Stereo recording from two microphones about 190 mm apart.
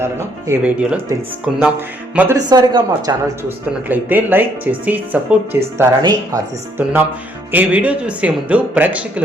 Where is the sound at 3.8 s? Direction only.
10° right (ahead or behind).